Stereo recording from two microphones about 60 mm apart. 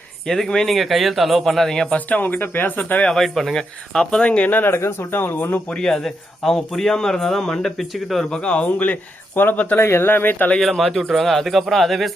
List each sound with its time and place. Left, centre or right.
0.3 s speech: centre
2.0 s speech: left
3.2 s speech: centre; by 4.7 s left
4.7 s speech: left
5.6 s speech: centre
5.9 s speech: centre
8.3 s speech: centre
9.8 s speech: left
10.6 s speech: centre